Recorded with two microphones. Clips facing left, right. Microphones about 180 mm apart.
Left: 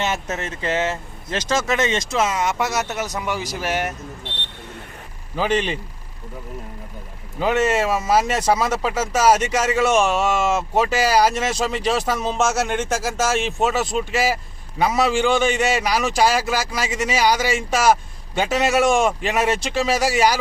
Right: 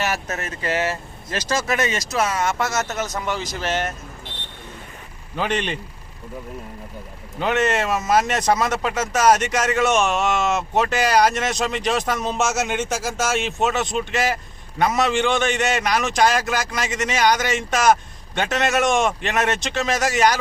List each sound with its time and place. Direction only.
0.0 s speech: 25° left (ahead or behind)
4.2 s a sound: 70° left (ahead or behind)
5.4 s speech: 5° left (ahead or behind)
7.3 s speech: 5° left (ahead or behind)
12.5 s speech: 10° right (ahead or behind)
12.9 s speech: centre (ahead or behind)